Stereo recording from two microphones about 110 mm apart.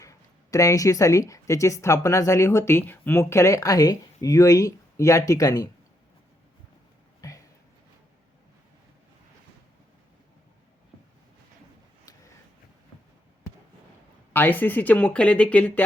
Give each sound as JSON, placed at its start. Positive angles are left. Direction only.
{"t": 0.0, "sound": "speech", "side_deg": 30}
{"t": 7.2, "sound": "a sound", "side_deg": 30}
{"t": 14.3, "sound": "speech", "side_deg": 15}